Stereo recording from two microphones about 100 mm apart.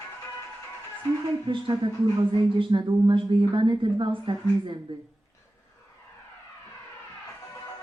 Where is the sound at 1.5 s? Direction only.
55° right (ahead or behind).